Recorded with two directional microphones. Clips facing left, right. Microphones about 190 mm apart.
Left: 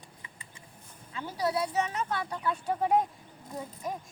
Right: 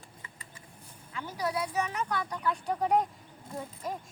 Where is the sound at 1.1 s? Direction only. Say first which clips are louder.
Left 2 dB; 30° left (ahead or behind).